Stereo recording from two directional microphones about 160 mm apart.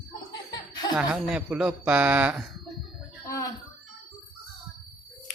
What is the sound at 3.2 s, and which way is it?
Speech, 20° left (ahead or behind).